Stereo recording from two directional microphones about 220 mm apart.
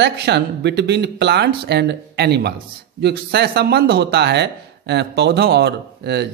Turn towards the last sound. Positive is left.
turn(degrees=-50)  # may be behind; listen again after turning